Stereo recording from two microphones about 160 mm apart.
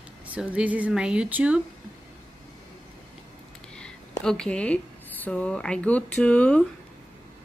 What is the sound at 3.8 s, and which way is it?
Speech, 5° left (ahead or behind).